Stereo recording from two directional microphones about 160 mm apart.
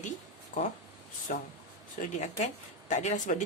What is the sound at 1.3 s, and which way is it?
Speech, 55° left (ahead or behind).